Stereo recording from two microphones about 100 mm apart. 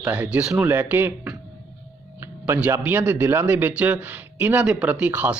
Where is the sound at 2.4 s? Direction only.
20° right (ahead or behind).